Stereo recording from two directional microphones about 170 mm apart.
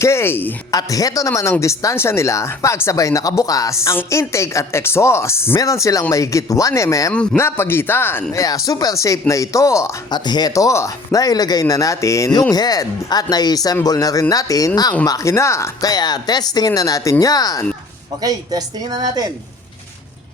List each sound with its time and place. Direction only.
0.0 s speech: 15° left (ahead or behind)
18.2 s speech: 20° right (ahead or behind)